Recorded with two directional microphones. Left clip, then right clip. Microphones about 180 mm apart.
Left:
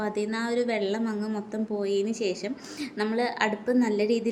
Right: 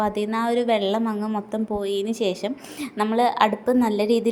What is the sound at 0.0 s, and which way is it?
A woman's voice, 25° right (ahead or behind).